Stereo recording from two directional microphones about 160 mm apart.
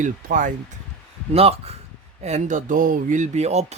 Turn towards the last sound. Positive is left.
turn(degrees=-45)  # may be behind; listen again after turning